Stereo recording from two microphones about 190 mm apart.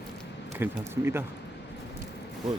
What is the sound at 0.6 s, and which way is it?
Speech, 10° right (ahead or behind).